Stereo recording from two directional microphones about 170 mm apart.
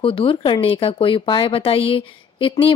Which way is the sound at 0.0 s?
30° left (ahead or behind).